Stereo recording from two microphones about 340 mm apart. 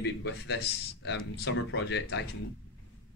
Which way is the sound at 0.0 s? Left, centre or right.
Left.